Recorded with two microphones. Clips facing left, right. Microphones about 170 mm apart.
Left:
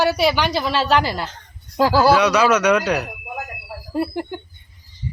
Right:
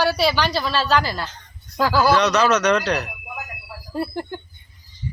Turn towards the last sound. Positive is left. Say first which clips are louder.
# left 3 dB
turn(degrees=15)  # may be behind; listen again after turning